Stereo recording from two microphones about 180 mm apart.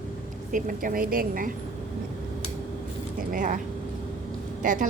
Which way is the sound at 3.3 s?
45° right (ahead or behind).